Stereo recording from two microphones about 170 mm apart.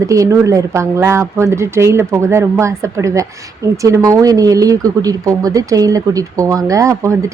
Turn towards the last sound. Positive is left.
turn(degrees=-20)  # may be behind; listen again after turning